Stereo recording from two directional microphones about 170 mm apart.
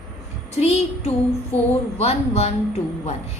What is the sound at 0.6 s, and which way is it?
A woman's voice, 40° left (ahead or behind).